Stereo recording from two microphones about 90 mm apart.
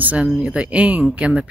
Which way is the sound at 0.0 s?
20° right (ahead or behind).